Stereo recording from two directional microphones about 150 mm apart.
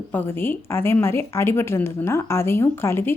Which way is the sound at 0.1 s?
15° left (ahead or behind).